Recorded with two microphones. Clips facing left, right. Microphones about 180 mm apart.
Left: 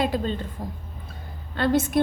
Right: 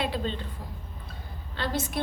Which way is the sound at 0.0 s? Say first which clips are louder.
Left 5 dB; 45° left (ahead or behind).